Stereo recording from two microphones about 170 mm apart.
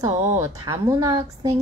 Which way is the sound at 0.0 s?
15° right (ahead or behind).